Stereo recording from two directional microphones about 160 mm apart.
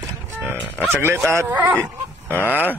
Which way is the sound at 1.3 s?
15° right (ahead or behind).